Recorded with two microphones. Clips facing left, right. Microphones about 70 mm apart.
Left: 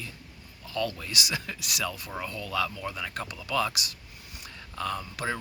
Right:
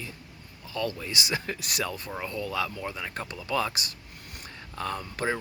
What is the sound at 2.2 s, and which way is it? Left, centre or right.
Speech, right.